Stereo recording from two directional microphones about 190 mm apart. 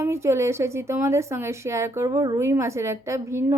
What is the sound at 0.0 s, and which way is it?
A woman's voice, 15° right (ahead or behind).